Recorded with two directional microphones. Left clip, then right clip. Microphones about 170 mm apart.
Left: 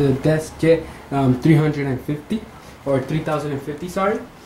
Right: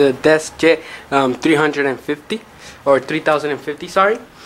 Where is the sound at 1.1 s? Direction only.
30° right (ahead or behind).